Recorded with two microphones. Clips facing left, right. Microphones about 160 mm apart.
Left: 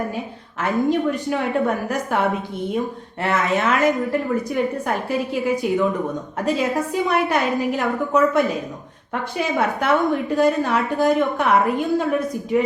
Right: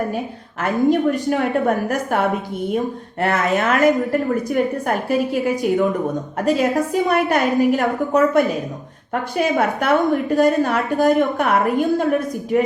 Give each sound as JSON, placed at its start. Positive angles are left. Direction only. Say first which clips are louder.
{"t": 0.6, "sound": "a woman's voice", "louder": "right 3 dB", "side_deg": -45}